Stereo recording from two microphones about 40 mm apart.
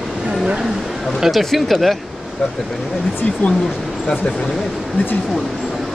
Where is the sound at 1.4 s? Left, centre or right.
Centre.